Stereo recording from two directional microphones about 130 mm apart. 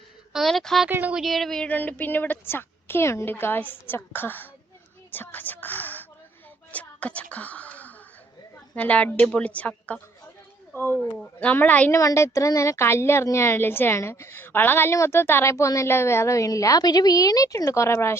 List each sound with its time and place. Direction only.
0.3 s speech: centre (ahead or behind)
0.9 s speech: 15° right (ahead or behind)
1.2 s a woman's voice: centre (ahead or behind)
5.1 s a sound: 15° left (ahead or behind)
8.7 s a woman's voice: 10° left (ahead or behind)
11.9 s a woman's voice: 25° left (ahead or behind)